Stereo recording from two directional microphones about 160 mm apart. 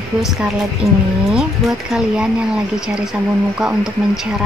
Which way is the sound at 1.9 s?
5° right (ahead or behind).